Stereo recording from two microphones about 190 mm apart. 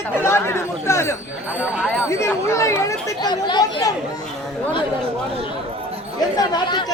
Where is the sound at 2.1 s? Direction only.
15° left (ahead or behind).